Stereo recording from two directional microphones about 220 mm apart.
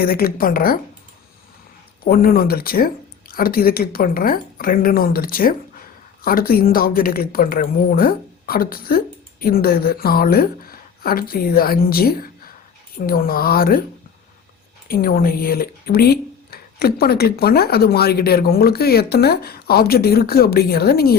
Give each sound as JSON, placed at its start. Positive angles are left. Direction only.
{"t": 0.0, "sound": "speech", "side_deg": 45}
{"t": 2.0, "sound": "speech", "side_deg": 40}
{"t": 14.8, "sound": "speech", "side_deg": 40}